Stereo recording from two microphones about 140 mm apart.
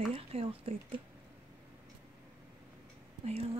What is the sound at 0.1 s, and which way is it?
Speech, 45° right (ahead or behind).